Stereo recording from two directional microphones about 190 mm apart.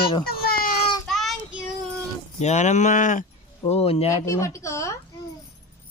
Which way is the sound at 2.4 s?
35° left (ahead or behind).